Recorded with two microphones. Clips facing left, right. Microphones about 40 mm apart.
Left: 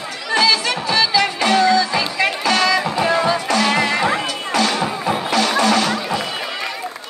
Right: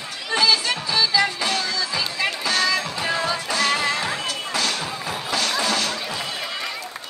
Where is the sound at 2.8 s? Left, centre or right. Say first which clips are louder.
Left 7 dB; left.